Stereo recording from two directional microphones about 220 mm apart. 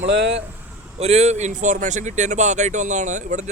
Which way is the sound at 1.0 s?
30° right (ahead or behind).